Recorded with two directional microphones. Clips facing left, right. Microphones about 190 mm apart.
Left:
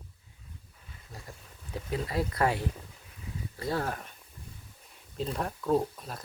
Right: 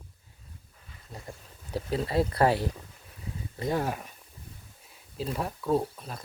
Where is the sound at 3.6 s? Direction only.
15° right (ahead or behind).